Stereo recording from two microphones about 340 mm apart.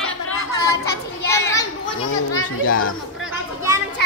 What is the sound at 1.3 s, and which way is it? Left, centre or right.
Children playing, centre.